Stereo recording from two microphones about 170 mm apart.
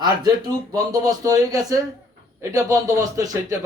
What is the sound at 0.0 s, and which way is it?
Speech, 25° right (ahead or behind).